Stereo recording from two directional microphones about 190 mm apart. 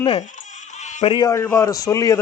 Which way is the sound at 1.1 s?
20° left (ahead or behind).